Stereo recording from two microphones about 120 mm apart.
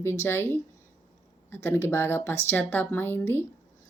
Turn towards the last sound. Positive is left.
turn(degrees=20)  # may be behind; listen again after turning